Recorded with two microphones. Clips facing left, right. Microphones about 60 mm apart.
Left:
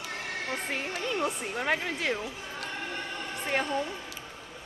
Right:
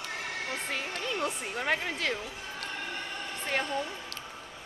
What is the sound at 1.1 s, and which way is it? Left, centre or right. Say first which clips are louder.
Speech: left 2 dB; centre.